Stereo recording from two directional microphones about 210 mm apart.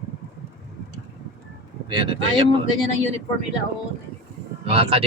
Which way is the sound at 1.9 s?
25° right (ahead or behind).